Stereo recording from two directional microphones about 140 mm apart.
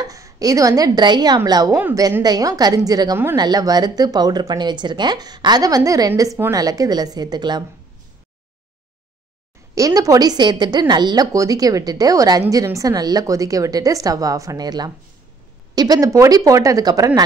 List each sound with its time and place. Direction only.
0.0 s a woman's voice: 25° right (ahead or behind)
9.8 s a woman's voice: 25° right (ahead or behind)